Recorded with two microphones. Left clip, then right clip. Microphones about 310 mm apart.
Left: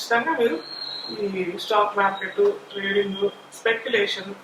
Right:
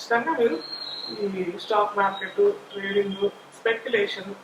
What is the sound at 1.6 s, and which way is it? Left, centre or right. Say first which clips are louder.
Speech: left 2 dB; right.